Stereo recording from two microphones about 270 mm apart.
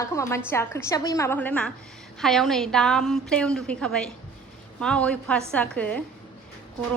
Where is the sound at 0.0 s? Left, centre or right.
Centre.